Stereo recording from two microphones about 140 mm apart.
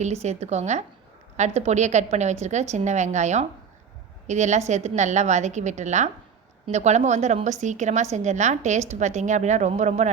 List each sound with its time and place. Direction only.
0.0 s a woman's voice: 55° right (ahead or behind)